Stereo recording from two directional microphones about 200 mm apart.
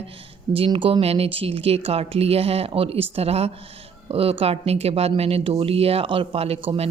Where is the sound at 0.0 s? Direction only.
25° right (ahead or behind).